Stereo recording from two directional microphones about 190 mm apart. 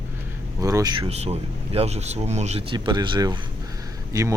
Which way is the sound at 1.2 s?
30° right (ahead or behind).